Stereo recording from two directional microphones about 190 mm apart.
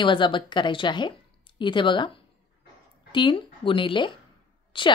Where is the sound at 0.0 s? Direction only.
25° left (ahead or behind).